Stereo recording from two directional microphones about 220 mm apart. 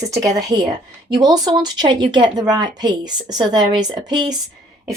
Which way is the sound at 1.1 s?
20° right (ahead or behind).